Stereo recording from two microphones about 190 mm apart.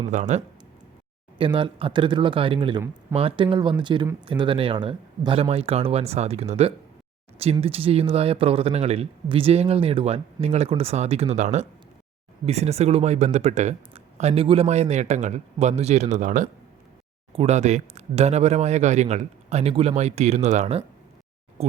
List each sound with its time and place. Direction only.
0.1 s speech: 40° right (ahead or behind)
1.4 s speech: 25° right (ahead or behind)